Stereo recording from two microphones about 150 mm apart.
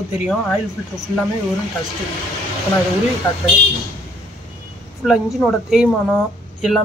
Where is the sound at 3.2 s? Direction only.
15° left (ahead or behind).